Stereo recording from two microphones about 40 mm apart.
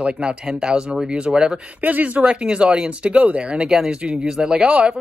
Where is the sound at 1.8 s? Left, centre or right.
Right.